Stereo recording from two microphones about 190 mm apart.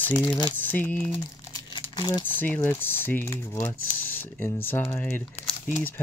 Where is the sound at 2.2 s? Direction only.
10° left (ahead or behind).